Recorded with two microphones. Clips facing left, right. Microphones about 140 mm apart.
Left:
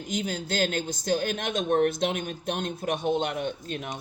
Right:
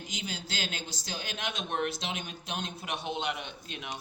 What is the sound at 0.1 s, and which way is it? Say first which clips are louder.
Speech: left 11 dB; 50° left (ahead or behind).